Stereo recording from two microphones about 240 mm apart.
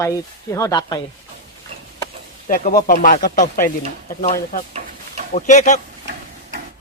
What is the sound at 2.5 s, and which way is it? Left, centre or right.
Speech, left.